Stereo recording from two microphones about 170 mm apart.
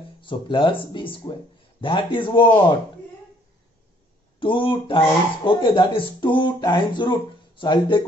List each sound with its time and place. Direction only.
0.2 s speech: 30° left (ahead or behind)
4.4 s speech: 30° left (ahead or behind)